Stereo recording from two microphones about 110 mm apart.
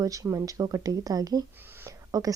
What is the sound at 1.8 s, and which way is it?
Whispering, 30° right (ahead or behind).